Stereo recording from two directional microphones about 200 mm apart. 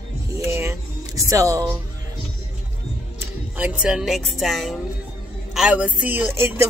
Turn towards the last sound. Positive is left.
turn(degrees=-10)  # may be behind; listen again after turning